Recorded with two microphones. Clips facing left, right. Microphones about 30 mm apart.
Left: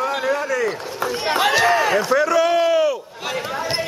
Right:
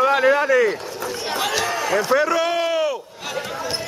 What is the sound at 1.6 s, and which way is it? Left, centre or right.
Speech, centre.